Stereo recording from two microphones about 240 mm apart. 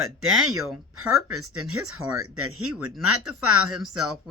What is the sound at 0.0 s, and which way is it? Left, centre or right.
Speech, right.